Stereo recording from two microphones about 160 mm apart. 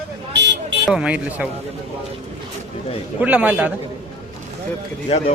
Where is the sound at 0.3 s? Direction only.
90° right.